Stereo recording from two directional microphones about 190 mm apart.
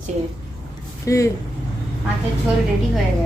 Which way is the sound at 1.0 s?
15° left (ahead or behind).